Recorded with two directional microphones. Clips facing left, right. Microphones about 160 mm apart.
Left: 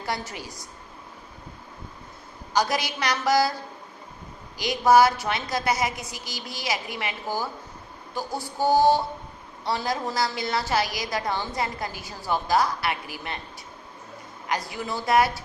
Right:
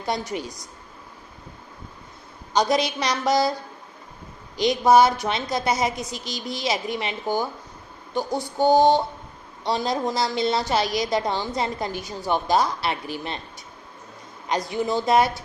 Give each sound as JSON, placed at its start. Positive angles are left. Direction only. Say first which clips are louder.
{"t": 0.0, "sound": "a woman's voice", "louder": "right 5 dB", "side_deg": -20}
{"t": 2.5, "sound": "a woman's voice", "louder": "right 4 dB", "side_deg": -20}
{"t": 4.5, "sound": "a woman's voice", "louder": "right 2 dB", "side_deg": -20}
{"t": 14.4, "sound": "a woman's voice", "louder": "right 5 dB", "side_deg": -20}